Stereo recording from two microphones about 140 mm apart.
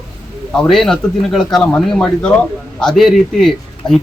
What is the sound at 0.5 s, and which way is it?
Speech, 5° left (ahead or behind).